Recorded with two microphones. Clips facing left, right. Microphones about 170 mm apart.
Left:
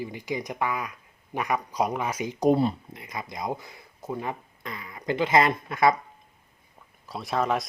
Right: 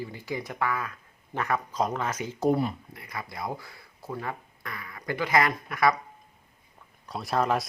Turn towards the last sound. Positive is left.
turn(degrees=0)  # may be behind; listen again after turning